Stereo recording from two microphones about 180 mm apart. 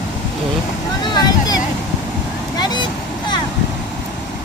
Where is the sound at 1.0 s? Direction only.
25° left (ahead or behind).